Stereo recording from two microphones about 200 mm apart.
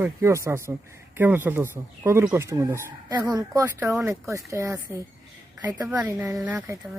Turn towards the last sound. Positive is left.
turn(degrees=-10)  # may be behind; listen again after turning